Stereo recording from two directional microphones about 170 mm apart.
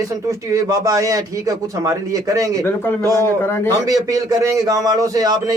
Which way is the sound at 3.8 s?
20° right (ahead or behind).